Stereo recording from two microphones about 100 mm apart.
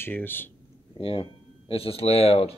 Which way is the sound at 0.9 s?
65° left (ahead or behind).